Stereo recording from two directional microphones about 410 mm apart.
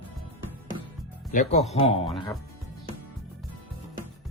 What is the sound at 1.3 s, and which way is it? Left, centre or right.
Speech, centre.